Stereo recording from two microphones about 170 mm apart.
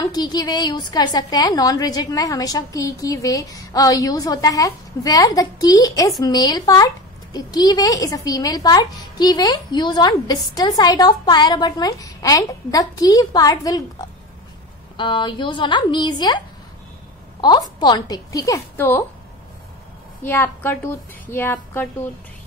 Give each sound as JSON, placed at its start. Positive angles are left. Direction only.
{"t": 0.0, "sound": "a woman's voice", "side_deg": 25}
{"t": 15.0, "sound": "a woman's voice", "side_deg": 30}
{"t": 20.2, "sound": "a woman's voice", "side_deg": 10}